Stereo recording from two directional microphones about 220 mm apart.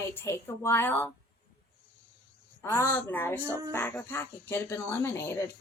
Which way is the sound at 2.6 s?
15° left (ahead or behind).